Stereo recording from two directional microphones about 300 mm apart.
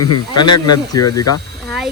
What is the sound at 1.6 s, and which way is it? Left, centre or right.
Speech, centre.